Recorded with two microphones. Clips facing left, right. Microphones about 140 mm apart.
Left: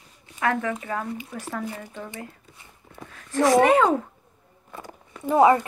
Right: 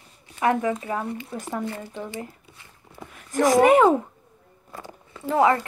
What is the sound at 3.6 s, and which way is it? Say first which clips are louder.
Speech: right 5 dB; 20° right (ahead or behind).